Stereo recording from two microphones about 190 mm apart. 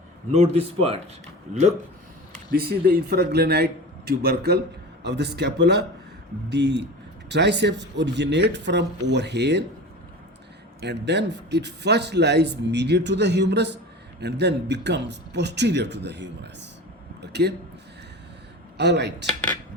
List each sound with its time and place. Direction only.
0.3 s speech: 35° right (ahead or behind)
2.5 s a man's voice: 55° right (ahead or behind)
10.8 s a man's voice: 65° right (ahead or behind)
18.8 s a man's voice: 65° right (ahead or behind)